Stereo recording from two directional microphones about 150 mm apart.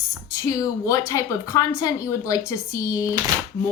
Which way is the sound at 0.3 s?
20° left (ahead or behind).